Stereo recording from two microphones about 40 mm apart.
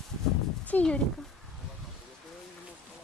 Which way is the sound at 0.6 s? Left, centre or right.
Left.